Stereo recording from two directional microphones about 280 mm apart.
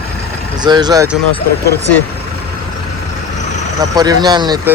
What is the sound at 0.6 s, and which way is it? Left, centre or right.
Speech, centre.